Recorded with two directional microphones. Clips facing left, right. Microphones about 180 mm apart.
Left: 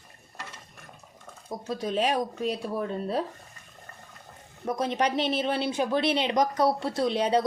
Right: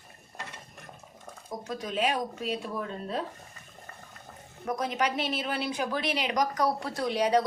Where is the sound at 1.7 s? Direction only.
30° left (ahead or behind).